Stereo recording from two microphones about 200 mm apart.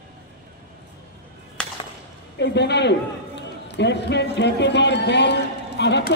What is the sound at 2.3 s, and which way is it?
A man's voice, 60° left (ahead or behind).